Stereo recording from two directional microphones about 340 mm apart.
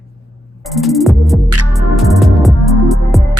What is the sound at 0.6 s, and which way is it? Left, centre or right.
Music, centre.